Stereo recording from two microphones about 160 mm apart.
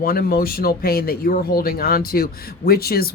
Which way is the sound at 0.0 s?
70° left (ahead or behind).